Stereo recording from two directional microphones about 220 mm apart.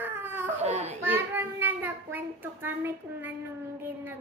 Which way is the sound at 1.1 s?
10° right (ahead or behind).